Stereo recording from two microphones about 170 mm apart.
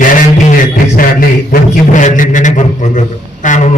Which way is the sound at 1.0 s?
55° left (ahead or behind).